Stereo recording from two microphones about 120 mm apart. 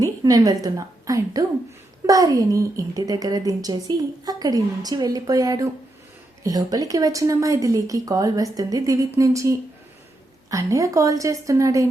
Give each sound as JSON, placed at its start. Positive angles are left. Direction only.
{"t": 0.0, "sound": "a woman's voice", "side_deg": -30}